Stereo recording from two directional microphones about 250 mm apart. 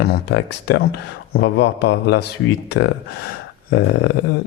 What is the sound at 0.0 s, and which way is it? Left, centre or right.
A man's voice, left.